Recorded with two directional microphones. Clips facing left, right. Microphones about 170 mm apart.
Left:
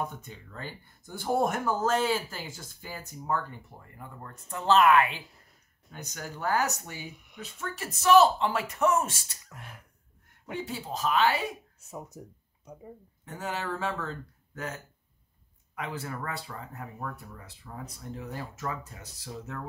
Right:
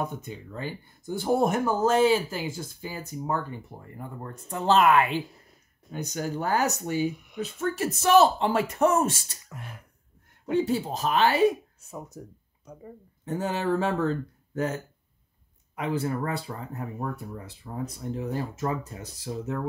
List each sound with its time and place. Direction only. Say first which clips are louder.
0.2 s speech: right 7 dB; 15° right (ahead or behind)
7.3 s speech: right 7 dB; 35° right (ahead or behind)
9.5 s a sound: right 5 dB; centre (ahead or behind)
10.4 s speech: right 11 dB; 25° right (ahead or behind)
11.0 s speech: left 1 dB; 45° right (ahead or behind)
12.2 s speech: right 3 dB; 10° left (ahead or behind)
13.2 s speech: right 7 dB; 25° right (ahead or behind)
15.7 s speech: right 8 dB; 25° right (ahead or behind)